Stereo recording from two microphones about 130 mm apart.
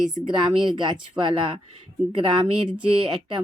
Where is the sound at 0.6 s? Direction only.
35° right (ahead or behind).